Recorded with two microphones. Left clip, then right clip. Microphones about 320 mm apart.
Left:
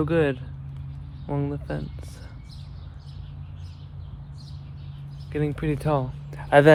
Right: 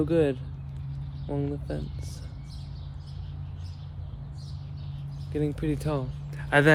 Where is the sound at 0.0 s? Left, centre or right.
Centre.